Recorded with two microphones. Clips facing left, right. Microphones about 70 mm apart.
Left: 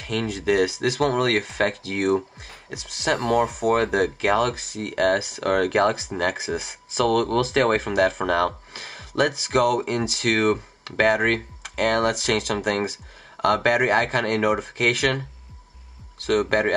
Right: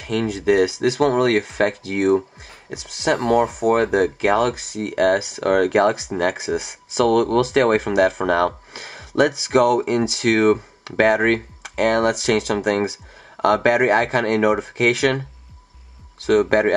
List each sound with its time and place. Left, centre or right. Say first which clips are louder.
0.0 s speech: right 4 dB; centre
16.3 s speech: right 5 dB; right